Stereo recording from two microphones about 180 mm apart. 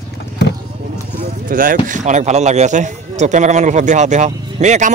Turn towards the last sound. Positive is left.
turn(degrees=-40)  # may be behind; listen again after turning